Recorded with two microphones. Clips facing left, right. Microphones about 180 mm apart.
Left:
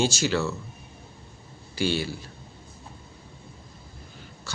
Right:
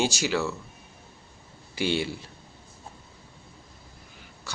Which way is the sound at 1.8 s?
20° right (ahead or behind).